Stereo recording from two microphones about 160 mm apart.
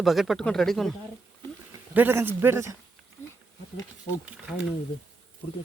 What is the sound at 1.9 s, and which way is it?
Speech, 10° right (ahead or behind).